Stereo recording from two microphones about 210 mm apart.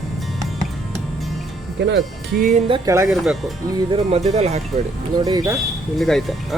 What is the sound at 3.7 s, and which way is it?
Speech, 25° right (ahead or behind).